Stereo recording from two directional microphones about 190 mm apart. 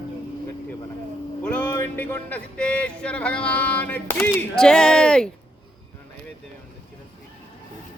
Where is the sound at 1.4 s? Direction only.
10° left (ahead or behind).